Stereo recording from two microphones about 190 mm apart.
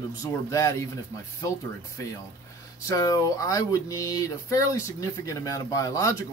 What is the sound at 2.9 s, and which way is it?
Speech, 20° left (ahead or behind).